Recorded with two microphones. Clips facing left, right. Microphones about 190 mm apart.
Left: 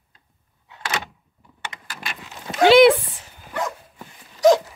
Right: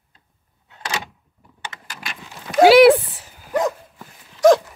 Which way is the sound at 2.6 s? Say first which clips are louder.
Right 3 dB; 5° right (ahead or behind).